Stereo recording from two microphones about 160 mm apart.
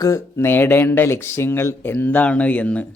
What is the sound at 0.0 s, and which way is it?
A man's voice, 15° left (ahead or behind).